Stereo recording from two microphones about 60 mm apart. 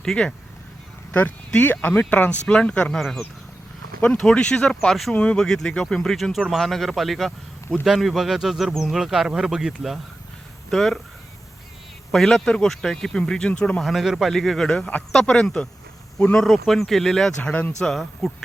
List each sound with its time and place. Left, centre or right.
0.0 s speech: centre
1.5 s speech: left; by 3.2 s centre
4.2 s speech: centre
5.1 s speech: left
5.4 s a man's voice: centre
10.7 s a man's voice: centre
12.1 s speech: centre
13.8 s a man's voice: centre